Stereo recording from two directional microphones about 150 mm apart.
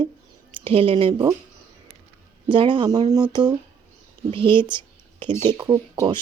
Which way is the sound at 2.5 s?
35° right (ahead or behind).